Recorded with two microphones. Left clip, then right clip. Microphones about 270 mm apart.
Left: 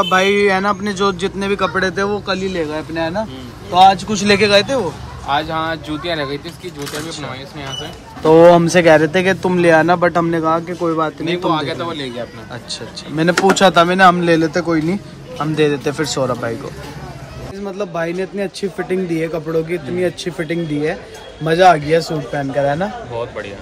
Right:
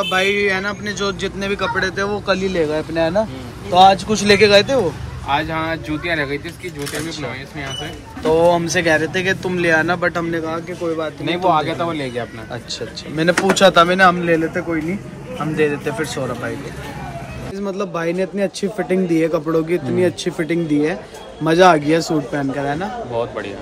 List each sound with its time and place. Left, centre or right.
1.0 s speech: left
8.2 s speech: left
11.2 s a man's voice: centre
13.1 s speech: centre
17.6 s a man's voice: centre